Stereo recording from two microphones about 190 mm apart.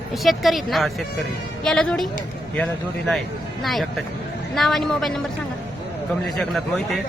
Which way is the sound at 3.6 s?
Centre (ahead or behind).